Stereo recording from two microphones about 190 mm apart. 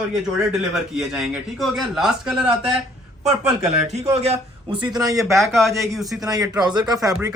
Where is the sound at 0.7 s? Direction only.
Centre (ahead or behind).